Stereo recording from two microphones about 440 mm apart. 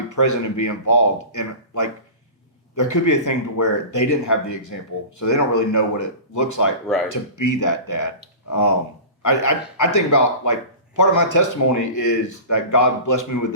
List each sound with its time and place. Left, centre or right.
0.2 s speech: left